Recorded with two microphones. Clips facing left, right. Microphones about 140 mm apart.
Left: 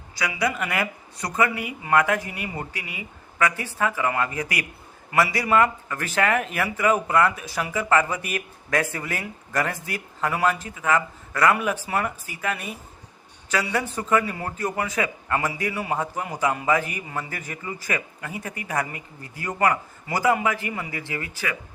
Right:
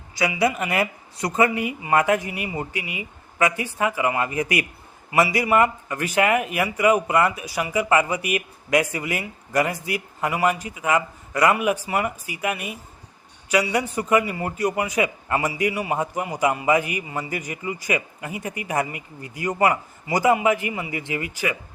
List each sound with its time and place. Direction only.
0.2 s a man's voice: 25° right (ahead or behind)